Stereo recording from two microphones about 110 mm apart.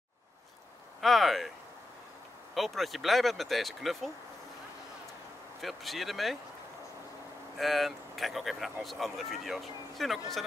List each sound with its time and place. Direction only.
1.0 s speech: centre (ahead or behind)
2.5 s speech: centre (ahead or behind)
5.6 s speech: centre (ahead or behind)
7.5 s speech: centre (ahead or behind)